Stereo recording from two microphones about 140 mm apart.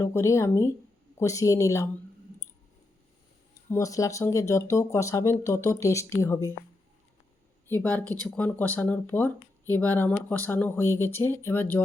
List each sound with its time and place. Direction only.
0.0 s speech: 20° left (ahead or behind)
3.7 s speech: 25° left (ahead or behind)
7.7 s speech: 15° left (ahead or behind)